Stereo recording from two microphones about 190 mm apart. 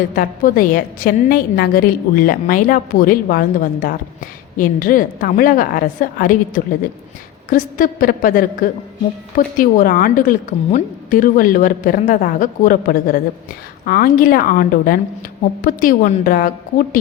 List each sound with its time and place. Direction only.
0.2 s a woman's voice: 50° left (ahead or behind)